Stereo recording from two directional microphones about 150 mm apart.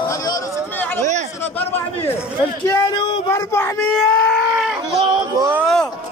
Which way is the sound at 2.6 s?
20° left (ahead or behind).